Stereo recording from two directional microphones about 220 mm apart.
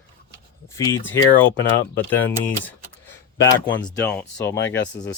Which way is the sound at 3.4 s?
20° left (ahead or behind).